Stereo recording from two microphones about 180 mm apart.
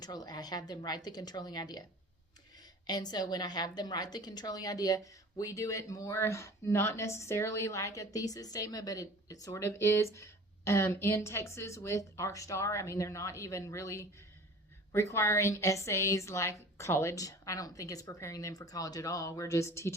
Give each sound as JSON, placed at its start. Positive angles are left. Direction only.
{"t": 0.0, "sound": "a woman's voice", "side_deg": 20}
{"t": 2.8, "sound": "a woman's voice", "side_deg": 20}